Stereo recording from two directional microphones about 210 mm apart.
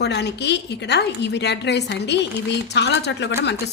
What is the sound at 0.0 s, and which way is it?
A woman's voice, 55° left (ahead or behind).